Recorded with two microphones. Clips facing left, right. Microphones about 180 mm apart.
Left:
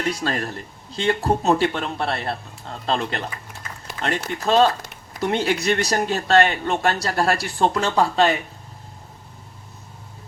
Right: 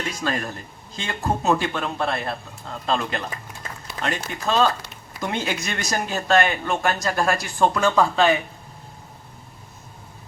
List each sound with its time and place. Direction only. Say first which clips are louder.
0.1 s speech: left 2 dB; 35° left (ahead or behind)